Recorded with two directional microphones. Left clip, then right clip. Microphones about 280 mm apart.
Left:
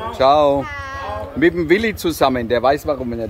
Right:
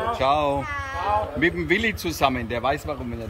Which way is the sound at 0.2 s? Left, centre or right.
Centre.